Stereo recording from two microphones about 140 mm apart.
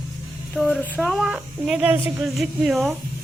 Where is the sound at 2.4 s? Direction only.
Centre (ahead or behind).